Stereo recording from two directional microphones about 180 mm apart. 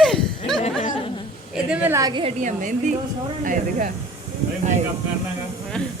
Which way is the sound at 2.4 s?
45° right (ahead or behind).